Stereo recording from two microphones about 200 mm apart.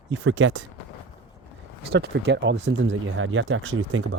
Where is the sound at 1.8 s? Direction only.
55° right (ahead or behind); by 4.2 s 75° right (ahead or behind).